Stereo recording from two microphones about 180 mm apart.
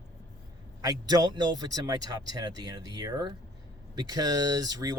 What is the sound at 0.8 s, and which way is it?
Speech, 20° right (ahead or behind).